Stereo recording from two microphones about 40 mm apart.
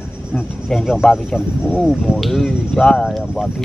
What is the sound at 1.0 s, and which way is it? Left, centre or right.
Speech, centre.